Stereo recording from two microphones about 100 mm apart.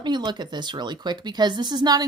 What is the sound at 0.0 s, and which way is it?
Speech, 50° right (ahead or behind).